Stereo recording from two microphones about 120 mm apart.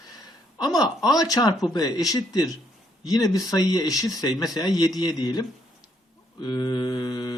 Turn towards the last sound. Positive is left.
turn(degrees=35)  # may be behind; listen again after turning